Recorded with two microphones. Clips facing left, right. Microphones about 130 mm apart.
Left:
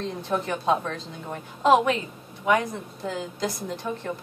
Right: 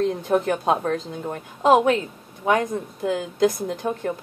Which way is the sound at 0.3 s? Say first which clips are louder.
Right 2 dB; 50° right (ahead or behind).